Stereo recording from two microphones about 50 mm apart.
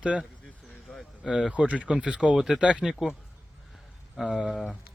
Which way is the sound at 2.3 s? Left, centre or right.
Centre.